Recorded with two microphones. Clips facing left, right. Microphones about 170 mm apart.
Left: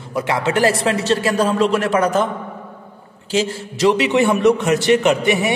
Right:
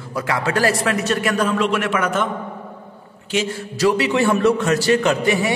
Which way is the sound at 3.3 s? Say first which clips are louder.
Left 2 dB; 25° left (ahead or behind).